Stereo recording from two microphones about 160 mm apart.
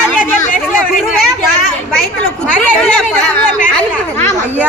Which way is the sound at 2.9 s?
5° left (ahead or behind).